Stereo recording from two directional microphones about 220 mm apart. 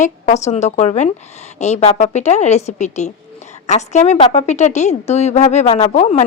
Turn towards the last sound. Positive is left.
turn(degrees=30)  # may be behind; listen again after turning